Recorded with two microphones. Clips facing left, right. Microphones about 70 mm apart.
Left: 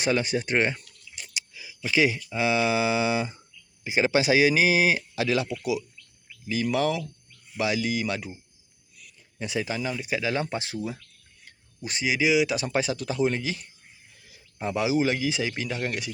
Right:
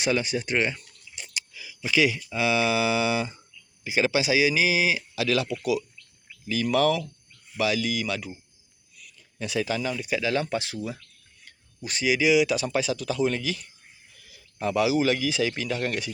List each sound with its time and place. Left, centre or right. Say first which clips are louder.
0.0 s speech: left 1 dB; left
1.3 s a sound: right 1 dB; centre
1.9 s speech: even; left
4.1 s speech: left 4 dB; left; by 16.1 s centre